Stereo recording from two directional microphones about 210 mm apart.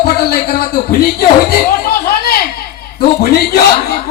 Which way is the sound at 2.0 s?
45° left (ahead or behind).